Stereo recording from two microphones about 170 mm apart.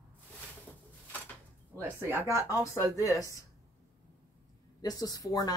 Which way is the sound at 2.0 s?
15° right (ahead or behind).